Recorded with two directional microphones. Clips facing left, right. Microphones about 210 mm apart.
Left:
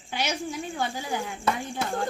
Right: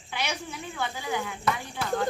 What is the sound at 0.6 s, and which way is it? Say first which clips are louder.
Speech: left 2 dB; 45° left (ahead or behind).